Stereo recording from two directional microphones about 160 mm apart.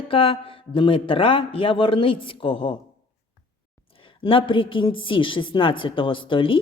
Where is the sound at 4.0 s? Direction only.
35° left (ahead or behind).